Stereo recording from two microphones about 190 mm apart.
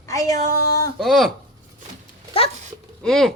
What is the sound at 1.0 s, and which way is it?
Speech, centre (ahead or behind).